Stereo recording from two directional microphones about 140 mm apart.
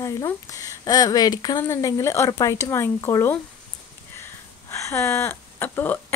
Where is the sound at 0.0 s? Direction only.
25° left (ahead or behind).